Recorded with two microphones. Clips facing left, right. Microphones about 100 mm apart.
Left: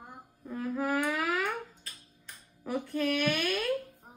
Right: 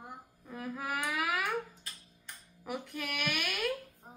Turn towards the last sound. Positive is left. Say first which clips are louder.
# left 7 dB
turn(degrees=-15)  # may be behind; listen again after turning